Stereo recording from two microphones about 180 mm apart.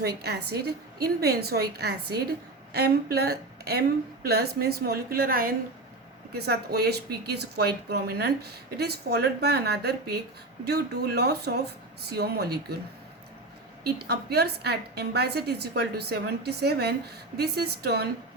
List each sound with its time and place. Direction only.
0.0 s speech: 60° right (ahead or behind)
13.8 s speech: 60° right (ahead or behind)